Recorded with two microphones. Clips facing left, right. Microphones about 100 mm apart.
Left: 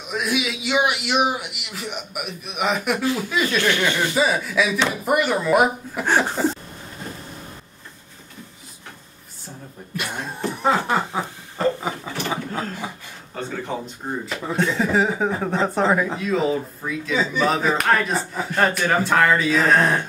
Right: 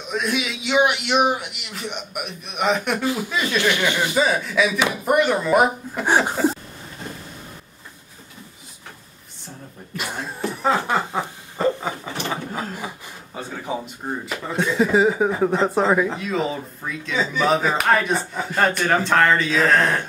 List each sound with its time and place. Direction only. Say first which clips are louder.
0.0 s speech: even; 5° left (ahead or behind)
3.0 s speech: left 1 dB; 20° right (ahead or behind)
4.2 s speech: right 1 dB; 5° left (ahead or behind)
6.0 s speech: right 1 dB; 15° right (ahead or behind)
6.3 s a sound: right 2 dB; 5° right (ahead or behind)
9.9 s speech: even; centre (ahead or behind)
11.8 s a sound: even; 5° left (ahead or behind)
13.3 s a man's voice: even; 10° right (ahead or behind)
14.8 s speech: right 6 dB; 10° right (ahead or behind)
19.7 s speech: left 1 dB; 15° left (ahead or behind)